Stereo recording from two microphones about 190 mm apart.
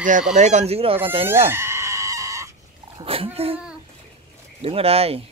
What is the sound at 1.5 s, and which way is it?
Chicken, 15° right (ahead or behind).